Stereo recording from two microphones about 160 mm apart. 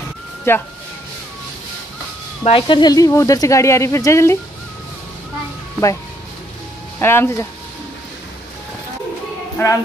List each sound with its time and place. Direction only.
0.5 s speech: 15° left (ahead or behind)
2.4 s speech: 35° left (ahead or behind); by 4.4 s 15° left (ahead or behind)
7.0 s speech: 15° left (ahead or behind)
9.6 s speech: 15° left (ahead or behind)